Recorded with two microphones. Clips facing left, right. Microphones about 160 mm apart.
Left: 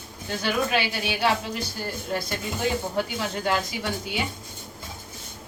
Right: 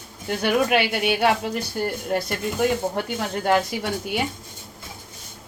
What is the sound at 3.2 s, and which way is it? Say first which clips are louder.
Speech: right 8 dB; 50° right (ahead or behind).